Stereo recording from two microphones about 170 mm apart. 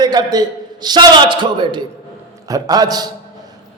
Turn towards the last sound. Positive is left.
turn(degrees=-25)  # may be behind; listen again after turning